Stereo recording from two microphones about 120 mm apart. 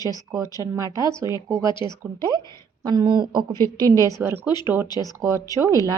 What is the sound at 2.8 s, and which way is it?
Speech, 35° right (ahead or behind).